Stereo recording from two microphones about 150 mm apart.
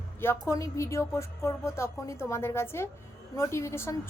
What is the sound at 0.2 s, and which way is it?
A woman's voice, 15° left (ahead or behind).